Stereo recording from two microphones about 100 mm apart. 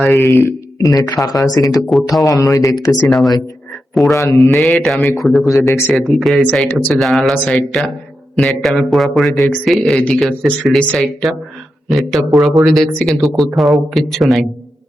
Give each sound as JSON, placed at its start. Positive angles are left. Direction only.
{"t": 0.2, "sound": "speech", "side_deg": 30}
{"t": 1.9, "sound": "speech", "side_deg": 0}
{"t": 2.2, "sound": "speech", "side_deg": 35}
{"t": 2.7, "sound": "speech", "side_deg": 45}
{"t": 3.1, "sound": "speech", "side_deg": 0}
{"t": 5.5, "sound": "speech", "side_deg": 30}
{"t": 5.9, "sound": "speech", "side_deg": 0}
{"t": 6.4, "sound": "speech", "side_deg": 10}
{"t": 6.9, "sound": "speech", "side_deg": 0}